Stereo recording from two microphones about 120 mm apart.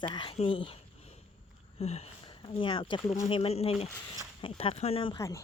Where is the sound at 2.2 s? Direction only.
40° left (ahead or behind).